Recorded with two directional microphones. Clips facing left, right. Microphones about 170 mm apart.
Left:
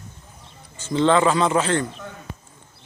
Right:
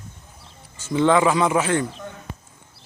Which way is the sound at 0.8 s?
10° right (ahead or behind).